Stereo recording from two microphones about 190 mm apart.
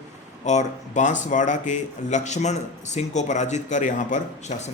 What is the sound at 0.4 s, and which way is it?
Speech, 40° left (ahead or behind).